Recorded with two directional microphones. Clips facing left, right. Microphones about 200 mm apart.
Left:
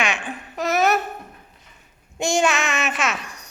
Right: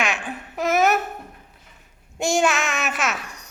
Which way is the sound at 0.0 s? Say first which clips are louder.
Even; 5° right (ahead or behind).